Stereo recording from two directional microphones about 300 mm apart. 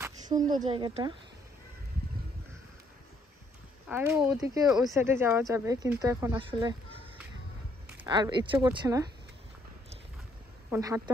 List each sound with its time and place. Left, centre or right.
0.0 s a sound: centre
0.7 s speech: centre
3.9 s speech: centre
10.7 s a woman's voice: centre